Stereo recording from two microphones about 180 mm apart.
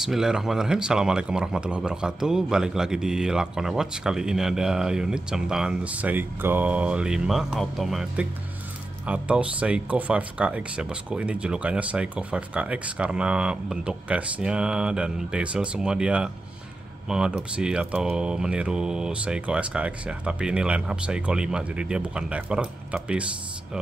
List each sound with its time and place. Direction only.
0.0 s speech: centre (ahead or behind)